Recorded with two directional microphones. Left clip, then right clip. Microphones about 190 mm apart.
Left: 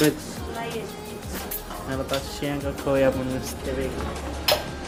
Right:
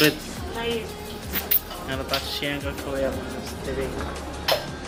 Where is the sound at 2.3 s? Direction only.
35° left (ahead or behind).